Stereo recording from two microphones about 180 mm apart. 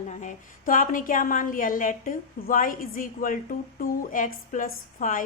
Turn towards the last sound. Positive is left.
turn(degrees=50)  # may be behind; listen again after turning